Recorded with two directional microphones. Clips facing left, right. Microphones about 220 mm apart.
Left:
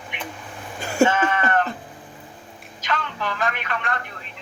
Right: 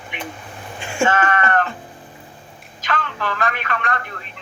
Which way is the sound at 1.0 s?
10° left (ahead or behind).